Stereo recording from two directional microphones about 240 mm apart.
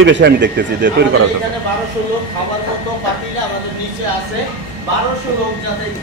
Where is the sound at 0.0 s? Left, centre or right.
Right.